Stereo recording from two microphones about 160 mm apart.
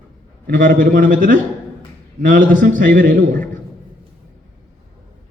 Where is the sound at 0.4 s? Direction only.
60° right (ahead or behind).